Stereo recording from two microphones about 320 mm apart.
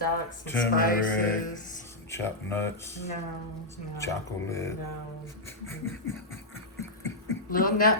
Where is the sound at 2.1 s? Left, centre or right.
Centre.